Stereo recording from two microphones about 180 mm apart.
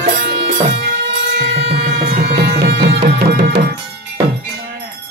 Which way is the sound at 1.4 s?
70° right (ahead or behind).